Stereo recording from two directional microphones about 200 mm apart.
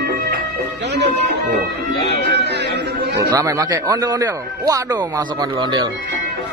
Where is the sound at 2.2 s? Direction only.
60° right (ahead or behind).